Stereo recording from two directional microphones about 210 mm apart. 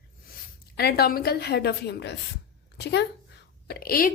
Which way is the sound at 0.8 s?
50° left (ahead or behind).